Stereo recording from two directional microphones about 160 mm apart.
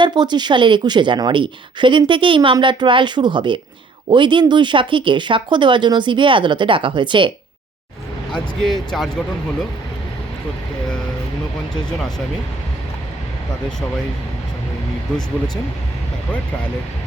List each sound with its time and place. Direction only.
0.0 s a woman's voice: 25° right (ahead or behind)
8.3 s speech: 5° left (ahead or behind)
11.9 s speech: 5° left (ahead or behind)